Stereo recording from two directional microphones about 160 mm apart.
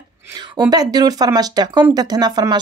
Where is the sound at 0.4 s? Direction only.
25° right (ahead or behind).